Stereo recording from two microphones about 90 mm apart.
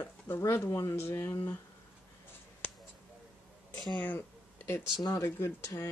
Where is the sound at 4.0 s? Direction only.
20° left (ahead or behind).